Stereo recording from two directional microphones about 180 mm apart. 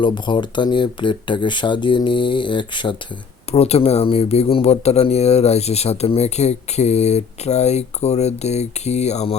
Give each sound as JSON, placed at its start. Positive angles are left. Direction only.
{"t": 0.0, "sound": "speech", "side_deg": 25}